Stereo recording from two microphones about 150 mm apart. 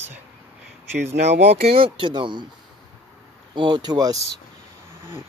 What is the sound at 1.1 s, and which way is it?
Speech, 45° right (ahead or behind).